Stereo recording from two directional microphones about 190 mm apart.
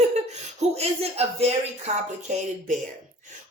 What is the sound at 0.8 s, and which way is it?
Speech, 35° right (ahead or behind).